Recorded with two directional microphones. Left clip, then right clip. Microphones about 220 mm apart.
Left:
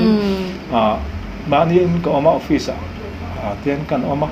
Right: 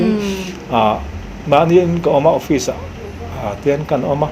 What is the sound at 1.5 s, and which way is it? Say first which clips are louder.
Speech: right 3 dB; 45° right (ahead or behind).